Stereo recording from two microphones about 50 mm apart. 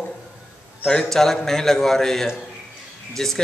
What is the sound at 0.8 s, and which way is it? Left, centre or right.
A man's voice, centre.